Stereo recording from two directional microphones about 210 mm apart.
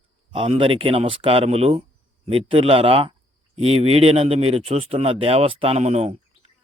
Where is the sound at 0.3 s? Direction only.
25° right (ahead or behind).